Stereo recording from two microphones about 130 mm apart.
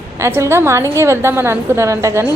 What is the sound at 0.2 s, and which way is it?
A woman's voice, 20° right (ahead or behind).